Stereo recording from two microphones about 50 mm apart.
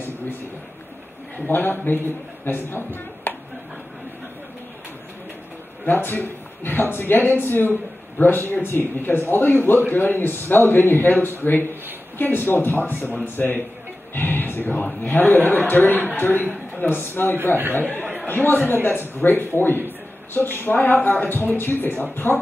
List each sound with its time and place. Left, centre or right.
1.5 s a man's voice: left
5.9 s a man's voice: left